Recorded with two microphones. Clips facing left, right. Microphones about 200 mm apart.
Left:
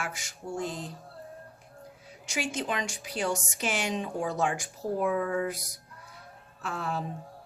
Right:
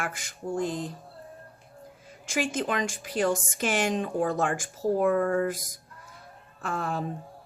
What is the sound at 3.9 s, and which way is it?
Speech, centre (ahead or behind).